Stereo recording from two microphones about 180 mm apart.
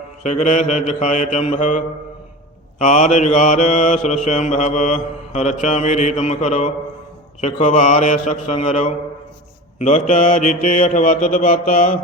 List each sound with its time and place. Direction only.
0.2 s mantra: 40° left (ahead or behind)
2.8 s mantra: 40° left (ahead or behind)